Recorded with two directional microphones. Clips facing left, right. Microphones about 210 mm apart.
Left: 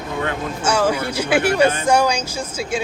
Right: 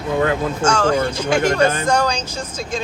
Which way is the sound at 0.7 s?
10° left (ahead or behind).